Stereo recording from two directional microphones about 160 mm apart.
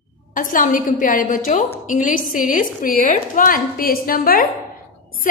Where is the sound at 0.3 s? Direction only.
55° left (ahead or behind).